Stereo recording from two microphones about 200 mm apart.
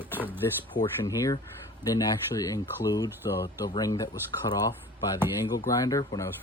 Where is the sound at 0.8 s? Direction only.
15° left (ahead or behind).